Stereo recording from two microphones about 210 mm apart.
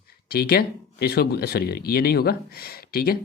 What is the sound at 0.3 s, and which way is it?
Speech, 45° left (ahead or behind).